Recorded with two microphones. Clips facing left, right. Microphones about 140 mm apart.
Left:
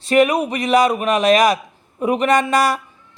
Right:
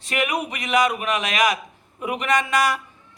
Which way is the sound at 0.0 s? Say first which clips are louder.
Left 10 dB; 35° left (ahead or behind).